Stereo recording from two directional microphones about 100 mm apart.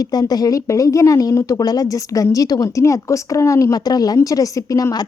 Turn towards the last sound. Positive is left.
turn(degrees=40)  # may be behind; listen again after turning